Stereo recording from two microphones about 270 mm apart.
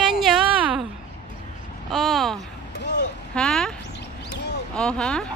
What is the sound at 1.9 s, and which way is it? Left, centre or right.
Speech, centre.